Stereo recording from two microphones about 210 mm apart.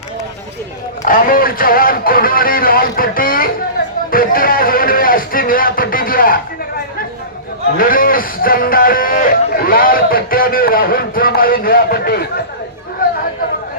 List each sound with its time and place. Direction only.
1.0 s speech: 40° left (ahead or behind)
4.1 s music: 45° left (ahead or behind)
7.8 s speech: 40° left (ahead or behind)